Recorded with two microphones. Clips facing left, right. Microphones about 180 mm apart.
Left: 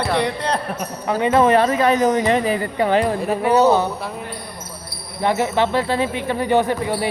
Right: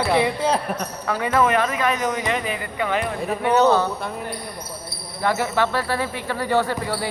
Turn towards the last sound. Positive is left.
turn(degrees=20)  # may be behind; listen again after turning